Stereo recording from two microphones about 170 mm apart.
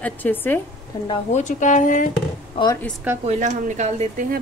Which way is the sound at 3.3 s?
45° right (ahead or behind).